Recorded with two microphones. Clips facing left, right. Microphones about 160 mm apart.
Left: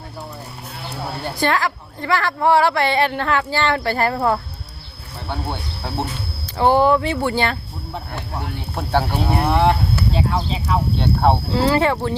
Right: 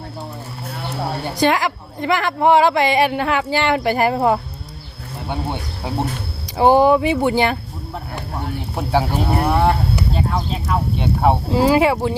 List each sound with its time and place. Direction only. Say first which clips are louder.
1.2 s a woman's voice: right 2 dB; 15° right (ahead or behind)
8.7 s a woman's voice: right 1 dB; 10° right (ahead or behind)
9.4 s speech: left 1 dB; centre (ahead or behind)
10.9 s a woman's voice: right 1 dB; 10° right (ahead or behind)